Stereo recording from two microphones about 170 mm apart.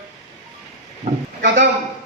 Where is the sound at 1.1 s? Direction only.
55° right (ahead or behind).